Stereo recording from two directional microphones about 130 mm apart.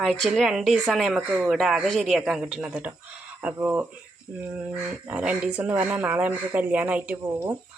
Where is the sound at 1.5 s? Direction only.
Centre (ahead or behind).